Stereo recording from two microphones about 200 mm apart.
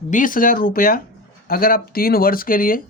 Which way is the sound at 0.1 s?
40° left (ahead or behind).